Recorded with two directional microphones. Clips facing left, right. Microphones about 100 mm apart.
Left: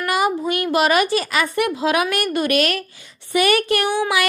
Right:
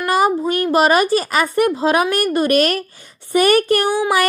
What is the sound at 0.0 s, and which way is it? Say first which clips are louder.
A woman's voice: right 4 dB; 35° right (ahead or behind).